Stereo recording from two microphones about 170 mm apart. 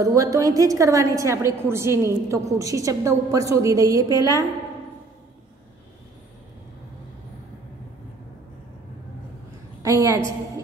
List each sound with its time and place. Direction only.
0.0 s a woman's voice: 20° right (ahead or behind)
9.8 s a woman's voice: 20° right (ahead or behind)